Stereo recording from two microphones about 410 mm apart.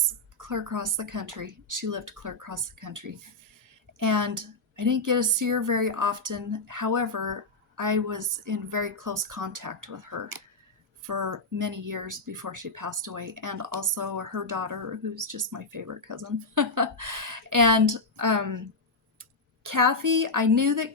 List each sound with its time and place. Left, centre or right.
0.0 s speech: right